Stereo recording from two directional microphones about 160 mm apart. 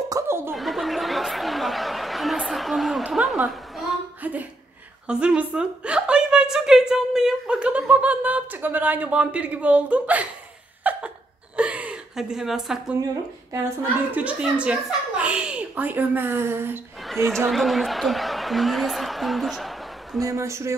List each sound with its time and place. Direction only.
0.1 s chuckle: 15° right (ahead or behind)
0.6 s chatter: centre (ahead or behind)
5.0 s a woman's voice: 5° right (ahead or behind)
10.8 s a sound: 10° right (ahead or behind)
14.1 s a woman's voice: 10° right (ahead or behind)
17.1 s a woman's voice: centre (ahead or behind)
20.2 s a woman's voice: 20° right (ahead or behind)